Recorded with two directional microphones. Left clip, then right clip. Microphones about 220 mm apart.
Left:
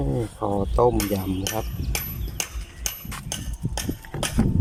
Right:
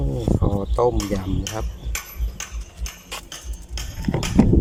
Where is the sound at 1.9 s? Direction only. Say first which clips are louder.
Even; 50° left (ahead or behind).